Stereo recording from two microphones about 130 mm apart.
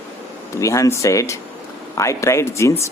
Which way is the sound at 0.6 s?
25° left (ahead or behind).